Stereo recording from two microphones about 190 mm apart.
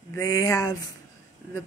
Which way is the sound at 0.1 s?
20° left (ahead or behind).